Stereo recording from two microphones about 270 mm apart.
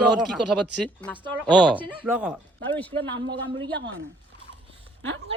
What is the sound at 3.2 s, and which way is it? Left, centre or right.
Speech, right.